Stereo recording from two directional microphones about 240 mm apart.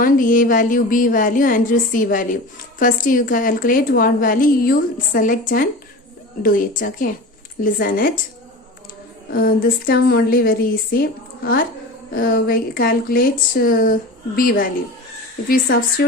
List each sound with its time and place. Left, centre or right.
0.0 s a woman's voice: left
9.3 s a woman's voice: left